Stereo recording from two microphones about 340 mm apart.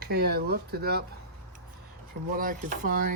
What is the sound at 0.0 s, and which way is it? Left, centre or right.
Speech, right.